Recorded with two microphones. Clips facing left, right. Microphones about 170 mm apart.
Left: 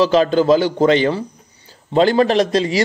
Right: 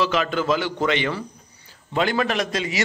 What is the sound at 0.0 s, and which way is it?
A man's voice, 35° left (ahead or behind).